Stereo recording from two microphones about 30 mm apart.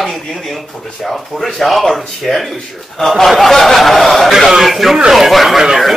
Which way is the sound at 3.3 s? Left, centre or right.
Centre.